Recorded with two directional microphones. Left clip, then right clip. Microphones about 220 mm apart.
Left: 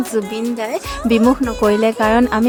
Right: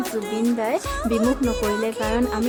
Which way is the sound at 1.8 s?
35° left (ahead or behind).